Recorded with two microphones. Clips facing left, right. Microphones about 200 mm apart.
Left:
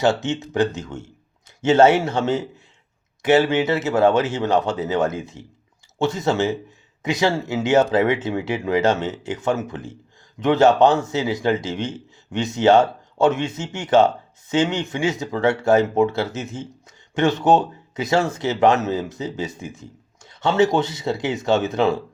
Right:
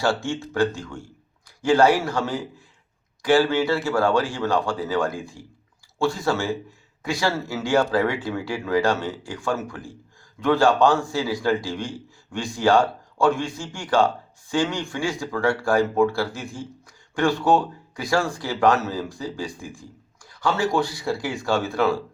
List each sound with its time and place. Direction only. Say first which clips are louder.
0.0 s a man's voice: left 4 dB; 20° left (ahead or behind)